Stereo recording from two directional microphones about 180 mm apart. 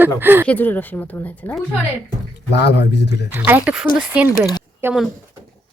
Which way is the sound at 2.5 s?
70° left (ahead or behind).